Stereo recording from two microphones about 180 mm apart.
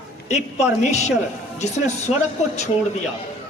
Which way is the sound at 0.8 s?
40° left (ahead or behind).